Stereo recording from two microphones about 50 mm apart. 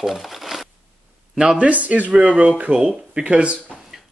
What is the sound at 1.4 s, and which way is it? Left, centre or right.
Speech, right.